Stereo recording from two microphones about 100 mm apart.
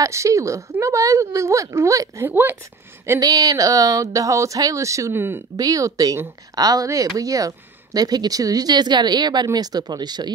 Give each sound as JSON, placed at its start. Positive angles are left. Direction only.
{"t": 0.0, "sound": "speech", "side_deg": -30}
{"t": 2.2, "sound": "speech", "side_deg": -20}
{"t": 3.2, "sound": "speech", "side_deg": -40}
{"t": 5.6, "sound": "speech", "side_deg": -35}